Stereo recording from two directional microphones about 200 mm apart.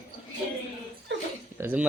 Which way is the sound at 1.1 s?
60° right (ahead or behind).